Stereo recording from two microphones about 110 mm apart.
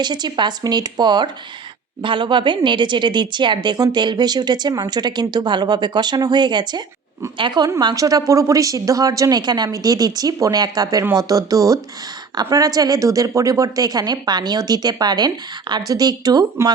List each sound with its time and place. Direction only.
0.0 s speech: 40° right (ahead or behind)